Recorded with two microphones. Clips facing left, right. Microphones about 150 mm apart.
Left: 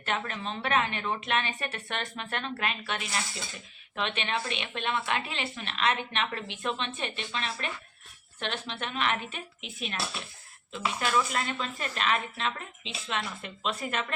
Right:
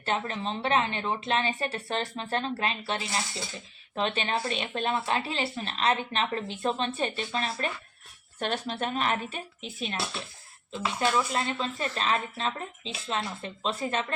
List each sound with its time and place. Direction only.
0.0 s speech: 30° right (ahead or behind)